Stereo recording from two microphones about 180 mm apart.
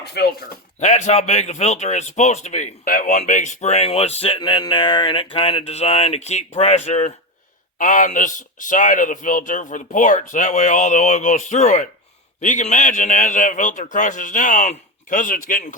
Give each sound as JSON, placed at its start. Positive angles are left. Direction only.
{"t": 0.0, "sound": "speech", "side_deg": 60}
{"t": 0.8, "sound": "a man's voice", "side_deg": 40}